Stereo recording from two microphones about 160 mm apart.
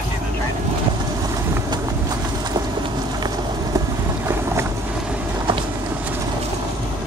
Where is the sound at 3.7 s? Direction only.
15° right (ahead or behind).